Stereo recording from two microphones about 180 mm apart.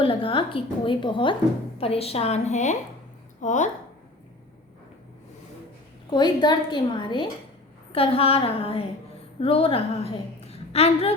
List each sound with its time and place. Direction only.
0.0 s a woman's voice: 30° left (ahead or behind)
6.1 s a woman's voice: 25° left (ahead or behind)